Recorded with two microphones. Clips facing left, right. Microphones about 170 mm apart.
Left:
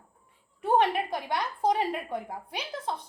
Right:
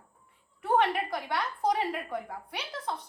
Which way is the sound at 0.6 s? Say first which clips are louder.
Left 2 dB; 30° left (ahead or behind).